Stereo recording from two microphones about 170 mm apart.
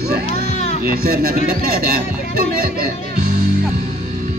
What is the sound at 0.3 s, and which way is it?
Music, 40° left (ahead or behind).